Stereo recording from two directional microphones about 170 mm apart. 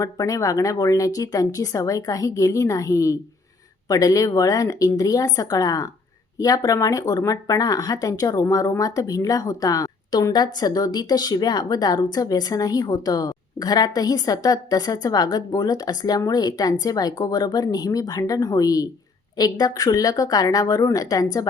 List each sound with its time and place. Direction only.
0.0 s speech: 20° left (ahead or behind)